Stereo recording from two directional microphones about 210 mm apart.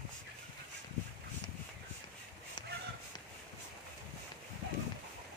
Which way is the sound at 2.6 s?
20° left (ahead or behind).